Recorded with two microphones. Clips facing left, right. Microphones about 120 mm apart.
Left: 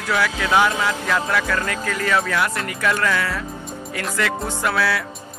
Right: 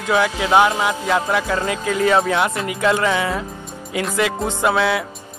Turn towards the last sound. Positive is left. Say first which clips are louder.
# right 4 dB
turn(degrees=-20)  # may be behind; listen again after turning